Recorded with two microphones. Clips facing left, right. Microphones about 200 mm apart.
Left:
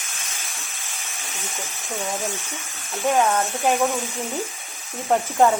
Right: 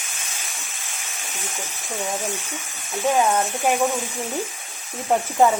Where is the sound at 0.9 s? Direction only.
Centre (ahead or behind).